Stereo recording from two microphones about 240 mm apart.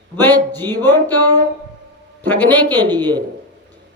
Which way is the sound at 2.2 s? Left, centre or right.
Centre.